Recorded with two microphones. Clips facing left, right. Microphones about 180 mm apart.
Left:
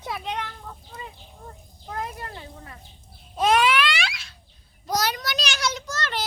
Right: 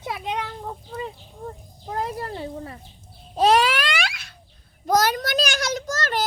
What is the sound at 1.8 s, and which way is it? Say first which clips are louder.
Speech: right 5 dB; 35° right (ahead or behind).